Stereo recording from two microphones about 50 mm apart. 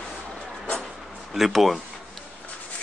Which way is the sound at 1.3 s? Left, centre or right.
Centre.